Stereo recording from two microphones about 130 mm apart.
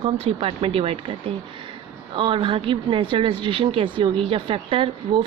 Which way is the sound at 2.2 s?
40° right (ahead or behind).